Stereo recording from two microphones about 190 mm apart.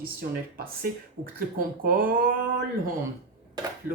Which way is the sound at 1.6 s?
50° right (ahead or behind).